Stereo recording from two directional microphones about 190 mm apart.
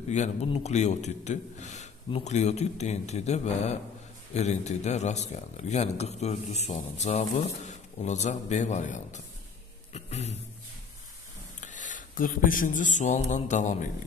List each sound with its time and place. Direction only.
0.1 s a man's voice: 35° left (ahead or behind)
9.9 s a sound: 35° left (ahead or behind)
11.6 s speech: 40° left (ahead or behind)